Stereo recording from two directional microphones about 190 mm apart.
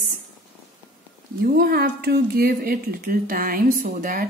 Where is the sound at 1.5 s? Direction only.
55° right (ahead or behind).